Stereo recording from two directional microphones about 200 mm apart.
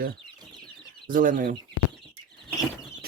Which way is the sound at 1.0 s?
45° right (ahead or behind).